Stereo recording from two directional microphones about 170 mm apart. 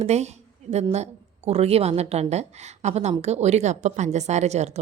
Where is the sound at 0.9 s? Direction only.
40° right (ahead or behind).